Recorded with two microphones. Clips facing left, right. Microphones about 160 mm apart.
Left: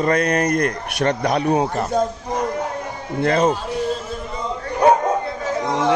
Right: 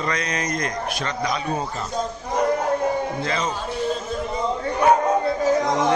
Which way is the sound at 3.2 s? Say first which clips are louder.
Left 8 dB; 60° left (ahead or behind).